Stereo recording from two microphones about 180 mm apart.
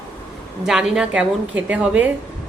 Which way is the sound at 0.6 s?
Centre (ahead or behind).